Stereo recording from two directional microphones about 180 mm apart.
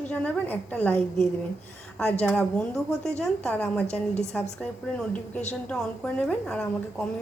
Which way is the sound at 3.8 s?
35° left (ahead or behind).